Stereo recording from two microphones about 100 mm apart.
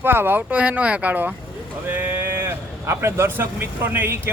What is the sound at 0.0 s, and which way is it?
Speech, 20° right (ahead or behind).